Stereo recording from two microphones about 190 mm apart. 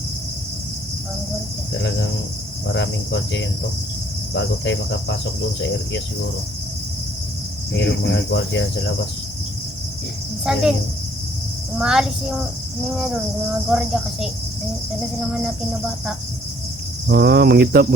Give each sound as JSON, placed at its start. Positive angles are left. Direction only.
{"t": 2.6, "sound": "cricket", "side_deg": 70}
{"t": 8.0, "sound": "speech", "side_deg": 65}
{"t": 10.4, "sound": "speech", "side_deg": -5}
{"t": 11.8, "sound": "speech", "side_deg": -5}
{"t": 13.7, "sound": "speech", "side_deg": -5}
{"t": 17.1, "sound": "cricket", "side_deg": -55}